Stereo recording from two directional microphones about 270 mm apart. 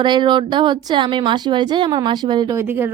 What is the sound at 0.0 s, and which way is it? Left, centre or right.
Speech, centre.